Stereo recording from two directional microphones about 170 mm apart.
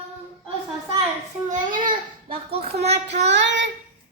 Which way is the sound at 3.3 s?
90° right.